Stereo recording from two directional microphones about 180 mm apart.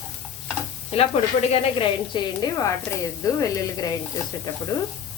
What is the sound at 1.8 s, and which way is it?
Speech, 20° left (ahead or behind).